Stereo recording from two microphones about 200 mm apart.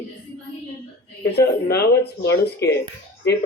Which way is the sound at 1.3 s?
55° left (ahead or behind).